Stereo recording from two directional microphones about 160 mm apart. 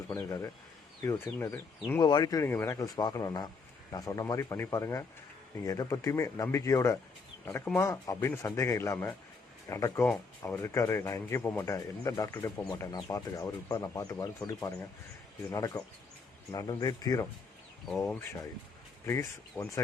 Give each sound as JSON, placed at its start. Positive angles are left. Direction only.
{"t": 0.1, "sound": "speech", "side_deg": 20}
{"t": 2.0, "sound": "speech", "side_deg": 25}